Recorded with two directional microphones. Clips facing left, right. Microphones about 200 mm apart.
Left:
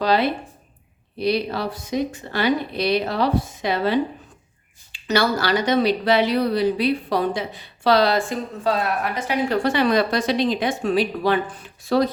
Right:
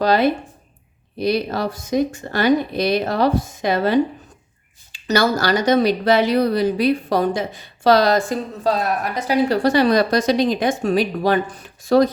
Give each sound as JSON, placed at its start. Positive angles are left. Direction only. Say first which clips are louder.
{"t": 0.0, "sound": "speech", "louder": "right 3 dB", "side_deg": -45}